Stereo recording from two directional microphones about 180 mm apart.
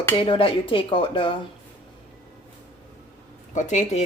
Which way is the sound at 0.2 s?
30° left (ahead or behind).